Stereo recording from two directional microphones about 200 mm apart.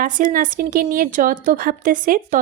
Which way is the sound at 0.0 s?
40° right (ahead or behind).